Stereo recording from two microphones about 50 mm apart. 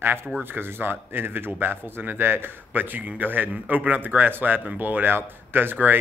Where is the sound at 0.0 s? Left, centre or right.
Right.